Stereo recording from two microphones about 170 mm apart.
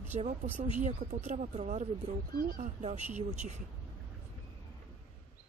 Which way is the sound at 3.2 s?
40° right (ahead or behind).